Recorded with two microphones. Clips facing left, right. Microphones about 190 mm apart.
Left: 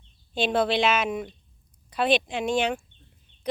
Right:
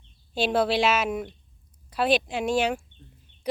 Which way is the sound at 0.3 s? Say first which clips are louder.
Even; 5° right (ahead or behind).